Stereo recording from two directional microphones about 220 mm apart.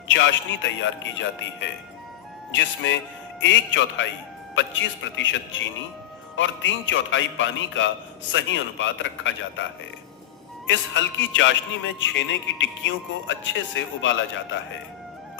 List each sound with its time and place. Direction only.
0.1 s speech: 55° left (ahead or behind)
10.7 s speech: 55° left (ahead or behind)